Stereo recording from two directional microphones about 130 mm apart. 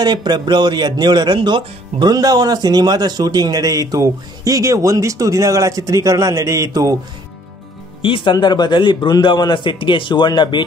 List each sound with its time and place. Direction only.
0.0 s speech: 35° right (ahead or behind)
8.0 s a man's voice: 40° left (ahead or behind)